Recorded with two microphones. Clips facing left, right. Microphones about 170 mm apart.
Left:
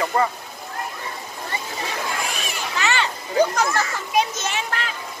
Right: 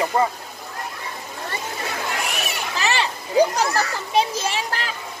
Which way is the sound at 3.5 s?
35° right (ahead or behind).